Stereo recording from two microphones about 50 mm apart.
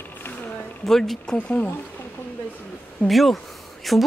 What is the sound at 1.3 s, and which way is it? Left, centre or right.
Speech, left.